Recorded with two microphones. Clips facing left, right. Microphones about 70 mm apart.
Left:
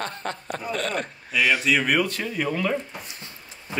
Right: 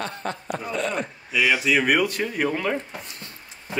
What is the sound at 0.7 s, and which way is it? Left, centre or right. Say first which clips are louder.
Speech: right 1 dB; left.